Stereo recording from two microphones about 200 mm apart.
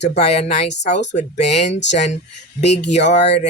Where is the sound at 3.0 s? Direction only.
60° left (ahead or behind).